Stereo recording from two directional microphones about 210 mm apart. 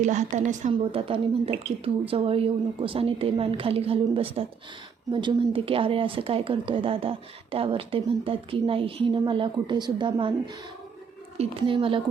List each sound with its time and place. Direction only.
0.0 s a woman's voice: 35° right (ahead or behind)